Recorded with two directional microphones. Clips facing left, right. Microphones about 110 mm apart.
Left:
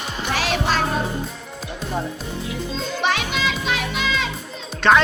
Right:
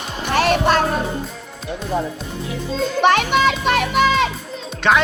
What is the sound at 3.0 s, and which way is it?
A child's voice, 60° right (ahead or behind).